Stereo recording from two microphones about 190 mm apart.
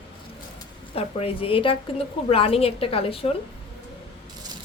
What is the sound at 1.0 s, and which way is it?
A woman's voice, 30° left (ahead or behind).